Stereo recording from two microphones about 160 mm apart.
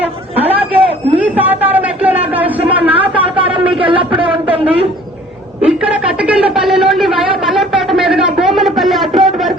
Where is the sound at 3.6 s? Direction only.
35° right (ahead or behind).